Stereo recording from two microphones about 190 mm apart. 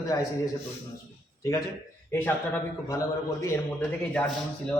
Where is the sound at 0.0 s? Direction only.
20° left (ahead or behind).